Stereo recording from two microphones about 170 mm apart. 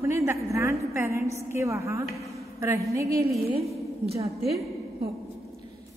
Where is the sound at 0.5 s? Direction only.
15° right (ahead or behind).